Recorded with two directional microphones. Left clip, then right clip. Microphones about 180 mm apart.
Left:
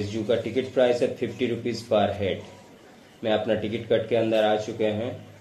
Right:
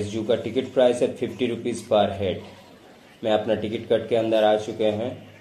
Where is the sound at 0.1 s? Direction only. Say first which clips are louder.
Right 1 dB; 20° right (ahead or behind).